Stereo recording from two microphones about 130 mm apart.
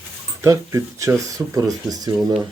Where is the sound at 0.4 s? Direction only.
25° right (ahead or behind).